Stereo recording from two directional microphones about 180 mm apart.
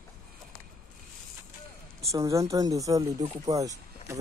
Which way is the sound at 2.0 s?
20° right (ahead or behind).